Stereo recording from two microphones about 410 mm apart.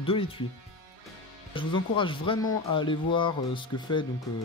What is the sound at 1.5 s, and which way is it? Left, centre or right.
Speech, centre.